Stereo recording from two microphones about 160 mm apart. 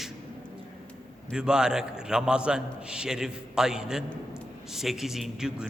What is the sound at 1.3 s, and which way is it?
A man's voice, 5° right (ahead or behind).